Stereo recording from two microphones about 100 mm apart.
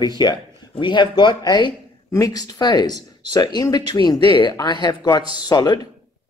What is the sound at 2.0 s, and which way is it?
Speech, 35° left (ahead or behind).